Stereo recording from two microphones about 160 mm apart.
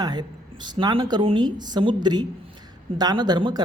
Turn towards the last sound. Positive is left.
turn(degrees=-30)  # may be behind; listen again after turning